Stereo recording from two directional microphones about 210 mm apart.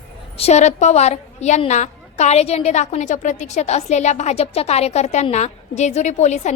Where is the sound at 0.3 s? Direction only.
30° left (ahead or behind).